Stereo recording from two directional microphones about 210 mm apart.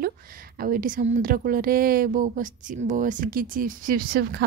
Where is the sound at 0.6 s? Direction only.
40° right (ahead or behind).